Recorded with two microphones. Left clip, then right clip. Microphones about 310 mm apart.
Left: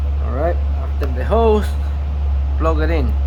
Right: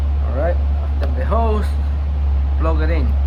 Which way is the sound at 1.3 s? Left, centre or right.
Left.